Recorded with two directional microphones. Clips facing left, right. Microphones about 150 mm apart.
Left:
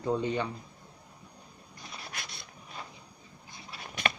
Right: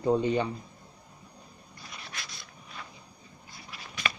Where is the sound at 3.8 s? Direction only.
55° left (ahead or behind).